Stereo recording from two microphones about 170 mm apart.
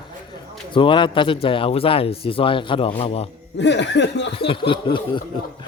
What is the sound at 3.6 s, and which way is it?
Speech, 90° left.